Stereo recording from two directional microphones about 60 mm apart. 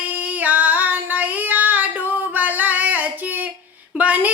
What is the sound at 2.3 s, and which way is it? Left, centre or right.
Singing, right.